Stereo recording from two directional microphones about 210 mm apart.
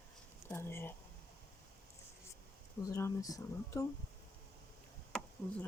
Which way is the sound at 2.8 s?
15° left (ahead or behind).